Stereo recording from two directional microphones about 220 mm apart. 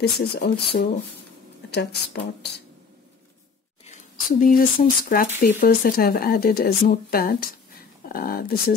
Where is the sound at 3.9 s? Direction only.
40° left (ahead or behind).